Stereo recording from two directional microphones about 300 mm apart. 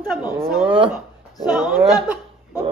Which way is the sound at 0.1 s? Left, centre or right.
Centre.